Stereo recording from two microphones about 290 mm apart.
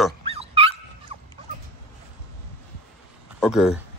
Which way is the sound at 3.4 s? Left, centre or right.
Centre.